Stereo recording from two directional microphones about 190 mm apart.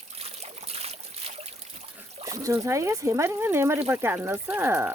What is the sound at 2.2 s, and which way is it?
Speech, 15° right (ahead or behind).